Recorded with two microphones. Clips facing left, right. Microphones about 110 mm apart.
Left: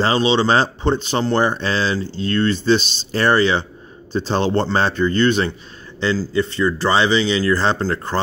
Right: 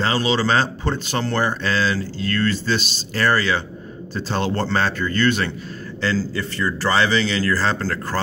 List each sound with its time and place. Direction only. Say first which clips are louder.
0.0 s speech: left 4 dB; 25° left (ahead or behind)